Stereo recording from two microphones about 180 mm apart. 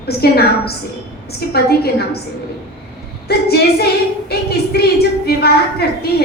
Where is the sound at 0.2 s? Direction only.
60° left (ahead or behind).